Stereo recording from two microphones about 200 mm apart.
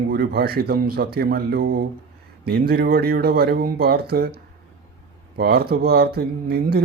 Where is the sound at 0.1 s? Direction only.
50° right (ahead or behind).